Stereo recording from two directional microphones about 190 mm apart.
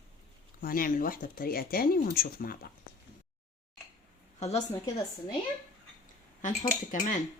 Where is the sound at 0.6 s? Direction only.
50° left (ahead or behind).